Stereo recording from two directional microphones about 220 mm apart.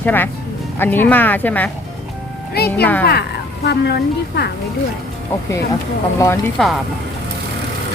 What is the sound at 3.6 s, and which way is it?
Speech, 50° left (ahead or behind).